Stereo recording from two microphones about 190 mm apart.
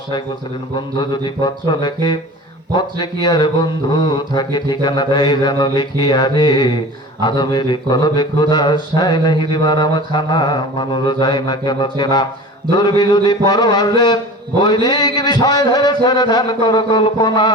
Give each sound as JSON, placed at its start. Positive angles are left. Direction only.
{"t": 0.9, "sound": "speech", "side_deg": 25}